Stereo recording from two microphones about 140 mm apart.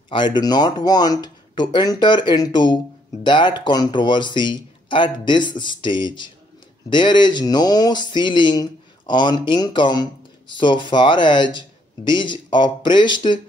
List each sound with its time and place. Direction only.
0.1 s speech: 35° left (ahead or behind)